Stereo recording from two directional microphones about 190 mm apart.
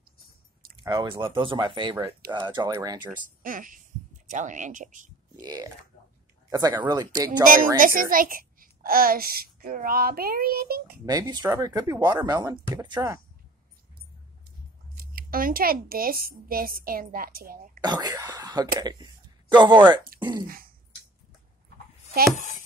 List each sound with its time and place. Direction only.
0.8 s speech: 25° right (ahead or behind)
3.4 s a child's voice: 45° right (ahead or behind)
5.4 s speech: 20° right (ahead or behind)
7.4 s a child's voice: 45° right (ahead or behind)
11.1 s speech: 20° right (ahead or behind)
15.0 s a child's voice: 50° right (ahead or behind)
17.7 s speech: 20° right (ahead or behind)
20.4 s throat clearing: 50° right (ahead or behind)